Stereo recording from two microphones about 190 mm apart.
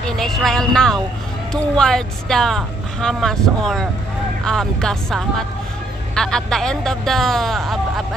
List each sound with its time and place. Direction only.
0.0 s speech: centre (ahead or behind)